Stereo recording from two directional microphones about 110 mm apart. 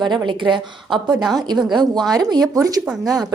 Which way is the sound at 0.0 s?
45° right (ahead or behind).